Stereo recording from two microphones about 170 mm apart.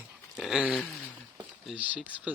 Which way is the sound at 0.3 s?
Centre (ahead or behind).